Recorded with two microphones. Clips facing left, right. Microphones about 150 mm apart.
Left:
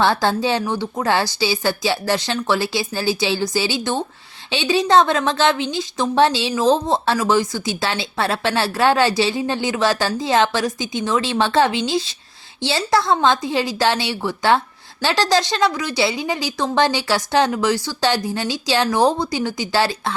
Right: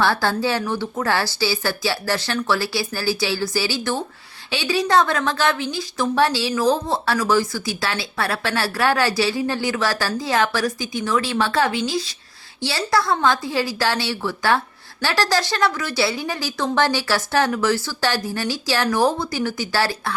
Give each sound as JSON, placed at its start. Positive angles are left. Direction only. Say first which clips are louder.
{"t": 0.0, "sound": "a woman's voice", "louder": "left 2 dB", "side_deg": 20}